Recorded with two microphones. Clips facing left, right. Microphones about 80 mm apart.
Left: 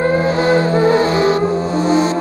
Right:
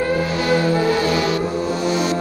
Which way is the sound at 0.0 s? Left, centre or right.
Left.